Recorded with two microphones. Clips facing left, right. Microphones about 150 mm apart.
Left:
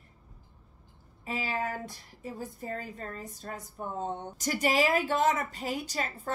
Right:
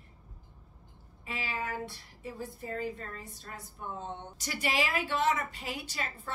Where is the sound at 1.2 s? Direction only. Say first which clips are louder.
Left 4 dB; 40° left (ahead or behind).